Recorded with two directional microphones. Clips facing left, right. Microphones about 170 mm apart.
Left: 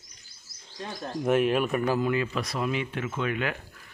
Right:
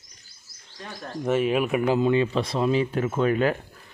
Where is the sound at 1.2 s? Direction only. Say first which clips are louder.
Right 1 dB; centre (ahead or behind).